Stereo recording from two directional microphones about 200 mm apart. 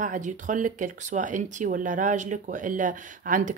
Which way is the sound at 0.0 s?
40° right (ahead or behind).